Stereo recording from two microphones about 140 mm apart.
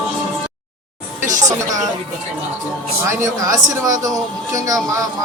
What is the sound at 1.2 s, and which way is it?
Speech, 65° right (ahead or behind).